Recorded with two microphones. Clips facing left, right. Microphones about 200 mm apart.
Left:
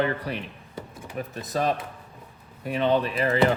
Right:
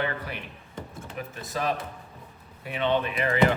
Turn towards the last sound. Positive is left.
turn(degrees=35)  # may be behind; listen again after turning